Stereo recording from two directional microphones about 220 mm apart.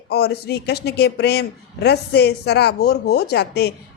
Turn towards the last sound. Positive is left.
turn(degrees=50)  # may be behind; listen again after turning